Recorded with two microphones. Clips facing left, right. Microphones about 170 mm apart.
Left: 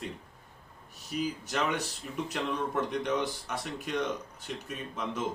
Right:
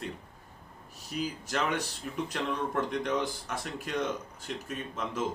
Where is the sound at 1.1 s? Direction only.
Centre (ahead or behind).